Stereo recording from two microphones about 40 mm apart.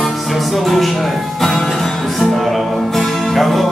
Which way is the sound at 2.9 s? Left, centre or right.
Centre.